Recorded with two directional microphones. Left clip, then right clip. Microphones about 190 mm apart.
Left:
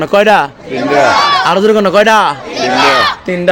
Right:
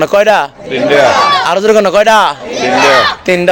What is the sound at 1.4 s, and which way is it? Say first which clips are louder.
A man's voice: right 1 dB; 25° left (ahead or behind).